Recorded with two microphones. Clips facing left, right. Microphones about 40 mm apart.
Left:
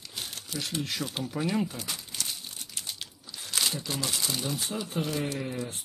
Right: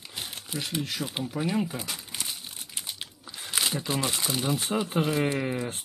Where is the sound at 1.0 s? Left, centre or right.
Right.